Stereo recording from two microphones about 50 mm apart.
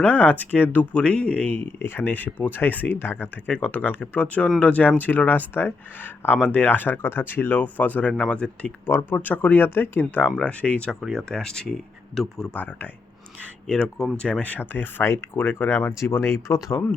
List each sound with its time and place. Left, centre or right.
0.0 s speech: left
1.5 s speech: left
8.3 s speech: left
8.9 s speech: left
9.1 s speech: left
11.3 s speech: centre
12.5 s speech: left
13.4 s speech: left
14.6 s speech: left